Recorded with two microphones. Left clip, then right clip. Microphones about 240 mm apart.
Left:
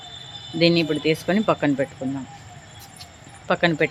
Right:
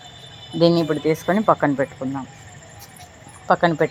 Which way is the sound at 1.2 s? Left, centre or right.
Centre.